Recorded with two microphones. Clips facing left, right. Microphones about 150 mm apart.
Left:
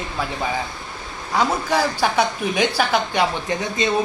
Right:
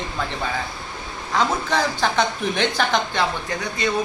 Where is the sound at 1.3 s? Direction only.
10° left (ahead or behind).